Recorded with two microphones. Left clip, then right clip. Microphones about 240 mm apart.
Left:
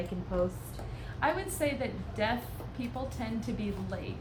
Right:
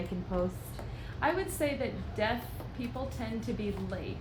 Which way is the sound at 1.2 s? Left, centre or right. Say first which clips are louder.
Even; left.